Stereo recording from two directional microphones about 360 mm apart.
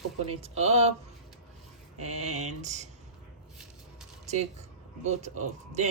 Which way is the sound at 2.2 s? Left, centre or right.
Centre.